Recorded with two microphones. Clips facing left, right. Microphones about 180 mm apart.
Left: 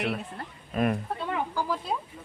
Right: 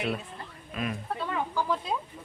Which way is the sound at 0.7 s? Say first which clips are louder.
Left 7 dB; 50° left (ahead or behind).